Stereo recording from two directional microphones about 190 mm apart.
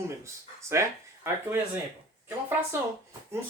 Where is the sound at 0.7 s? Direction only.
15° right (ahead or behind).